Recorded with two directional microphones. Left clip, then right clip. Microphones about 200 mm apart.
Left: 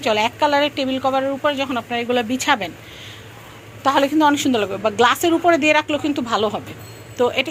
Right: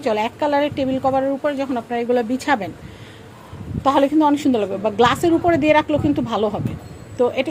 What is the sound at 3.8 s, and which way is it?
A woman's voice, 10° right (ahead or behind).